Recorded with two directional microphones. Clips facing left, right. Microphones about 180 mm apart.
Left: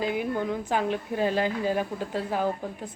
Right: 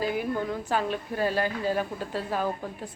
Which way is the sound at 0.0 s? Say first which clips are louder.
Left 1 dB; 15° left (ahead or behind).